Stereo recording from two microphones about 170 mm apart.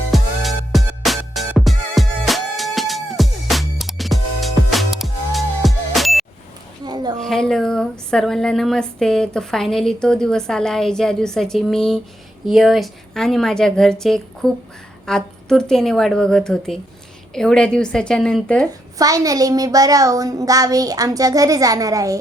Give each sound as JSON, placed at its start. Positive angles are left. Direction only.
{"t": 0.1, "sound": "music", "side_deg": 0}
{"t": 6.8, "sound": "a sound", "side_deg": -25}
{"t": 7.2, "sound": "speech", "side_deg": 0}
{"t": 18.7, "sound": "a woman's voice", "side_deg": -20}